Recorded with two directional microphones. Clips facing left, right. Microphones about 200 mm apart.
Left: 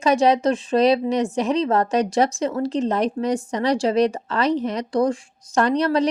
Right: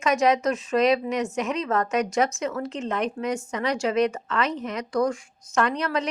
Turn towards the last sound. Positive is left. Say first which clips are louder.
# left 6 dB
turn(degrees=35)  # may be behind; listen again after turning